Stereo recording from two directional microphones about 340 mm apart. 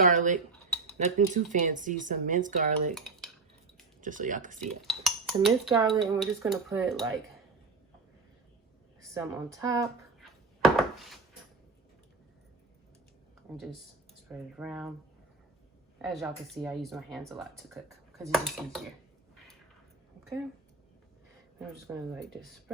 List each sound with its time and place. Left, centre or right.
0.0 s speech: right
2.9 s dishes: centre
4.0 s speech: right
4.9 s dishes: centre
6.1 s speech: centre
9.0 s a sound: centre
14.3 s speech: centre
16.0 s speech: centre
21.8 s speech: centre